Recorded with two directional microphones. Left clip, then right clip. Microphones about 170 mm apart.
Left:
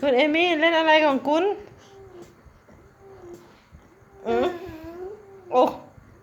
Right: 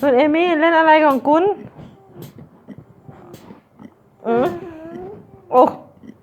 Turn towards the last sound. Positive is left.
turn(degrees=-10)  # may be behind; listen again after turning